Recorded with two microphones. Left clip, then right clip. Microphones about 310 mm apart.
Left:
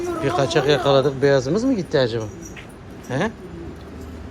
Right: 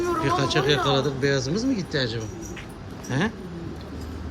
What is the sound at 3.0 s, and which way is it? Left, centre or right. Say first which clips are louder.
Speech: left 3 dB; centre.